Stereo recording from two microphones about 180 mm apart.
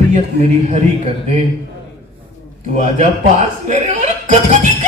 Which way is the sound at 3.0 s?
40° right (ahead or behind).